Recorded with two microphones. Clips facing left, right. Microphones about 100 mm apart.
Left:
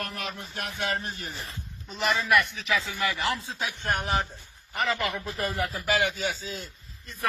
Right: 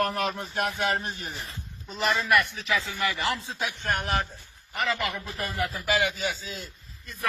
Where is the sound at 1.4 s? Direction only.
Centre (ahead or behind).